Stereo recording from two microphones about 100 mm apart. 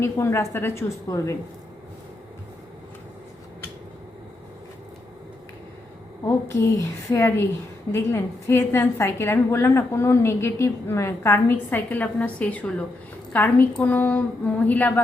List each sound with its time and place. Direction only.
0.0 s a woman's voice: 25° left (ahead or behind)
6.2 s a woman's voice: 25° left (ahead or behind)